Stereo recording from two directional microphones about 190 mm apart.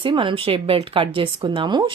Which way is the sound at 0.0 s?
25° right (ahead or behind).